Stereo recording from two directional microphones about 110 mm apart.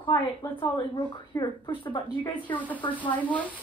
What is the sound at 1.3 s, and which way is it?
Speech, 35° left (ahead or behind).